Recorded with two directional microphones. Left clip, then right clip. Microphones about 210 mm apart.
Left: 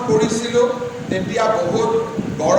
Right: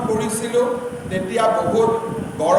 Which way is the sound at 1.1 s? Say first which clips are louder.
Even; 45° right (ahead or behind).